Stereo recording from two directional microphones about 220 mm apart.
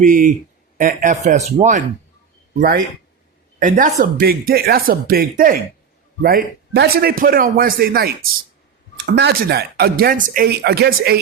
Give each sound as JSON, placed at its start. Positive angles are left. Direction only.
{"t": 0.0, "sound": "speech", "side_deg": -35}